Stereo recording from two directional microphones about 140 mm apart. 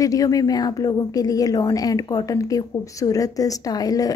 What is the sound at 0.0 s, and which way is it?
Speech, 25° left (ahead or behind).